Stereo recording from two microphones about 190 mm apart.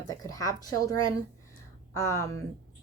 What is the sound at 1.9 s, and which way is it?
Speech, 15° left (ahead or behind).